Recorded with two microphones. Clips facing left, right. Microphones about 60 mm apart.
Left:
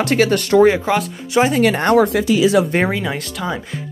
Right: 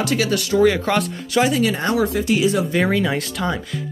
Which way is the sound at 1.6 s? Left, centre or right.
Left.